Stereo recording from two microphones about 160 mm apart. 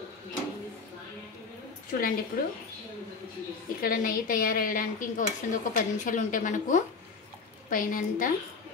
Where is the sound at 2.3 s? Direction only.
75° left (ahead or behind).